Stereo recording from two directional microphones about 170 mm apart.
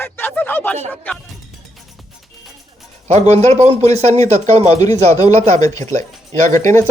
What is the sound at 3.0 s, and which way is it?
A man's voice, 40° right (ahead or behind).